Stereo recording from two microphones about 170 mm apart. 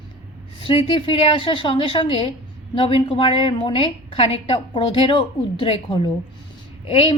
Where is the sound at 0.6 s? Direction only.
30° left (ahead or behind).